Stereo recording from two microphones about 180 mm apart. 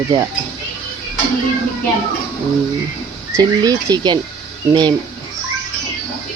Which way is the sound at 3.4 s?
20° right (ahead or behind).